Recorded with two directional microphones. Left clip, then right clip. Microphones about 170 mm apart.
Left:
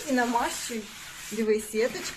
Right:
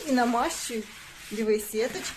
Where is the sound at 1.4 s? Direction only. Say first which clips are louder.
Left 1 dB; 25° right (ahead or behind).